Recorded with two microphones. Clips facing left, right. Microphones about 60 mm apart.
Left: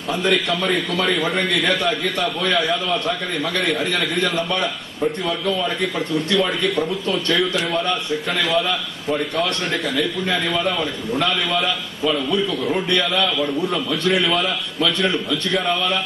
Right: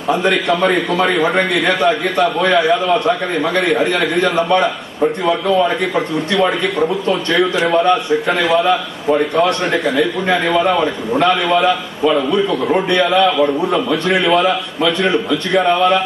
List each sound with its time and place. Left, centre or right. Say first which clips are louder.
0.3 s a man's voice: right 3 dB; centre
2.9 s a man's voice: right 7 dB; right
4.4 s a man's voice: right 8 dB; right
6.3 s a man's voice: right 5 dB; centre
7.7 s a man's voice: right 9 dB; right
9.7 s a man's voice: right 6 dB; centre
10.6 s a man's voice: right 7 dB; right
12.9 s a man's voice: right 9 dB; centre
15.6 s a man's voice: right 8 dB; right